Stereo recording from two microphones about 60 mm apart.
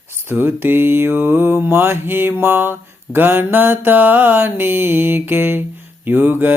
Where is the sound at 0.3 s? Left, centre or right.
Right.